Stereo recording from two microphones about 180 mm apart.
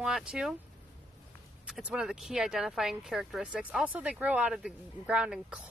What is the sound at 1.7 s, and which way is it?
Speech, 5° right (ahead or behind).